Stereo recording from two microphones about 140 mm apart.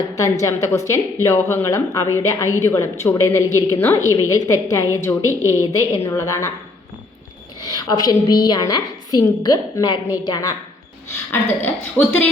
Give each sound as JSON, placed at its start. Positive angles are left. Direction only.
{"t": 0.0, "sound": "a woman's voice", "side_deg": 25}
{"t": 7.6, "sound": "a woman's voice", "side_deg": 30}
{"t": 11.3, "sound": "a woman's voice", "side_deg": 15}